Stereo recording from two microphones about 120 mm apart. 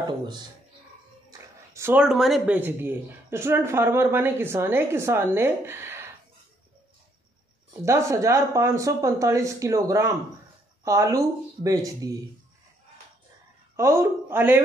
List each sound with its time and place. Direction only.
1.7 s a sound: 20° right (ahead or behind)
2.0 s speech: 5° right (ahead or behind)
2.4 s speech: 15° right (ahead or behind)
7.8 s speech: 25° right (ahead or behind)
13.7 s speech: 20° right (ahead or behind)